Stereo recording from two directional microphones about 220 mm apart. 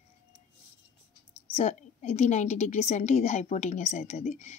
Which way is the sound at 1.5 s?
30° left (ahead or behind).